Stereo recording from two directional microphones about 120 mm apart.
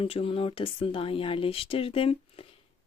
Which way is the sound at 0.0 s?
50° left (ahead or behind).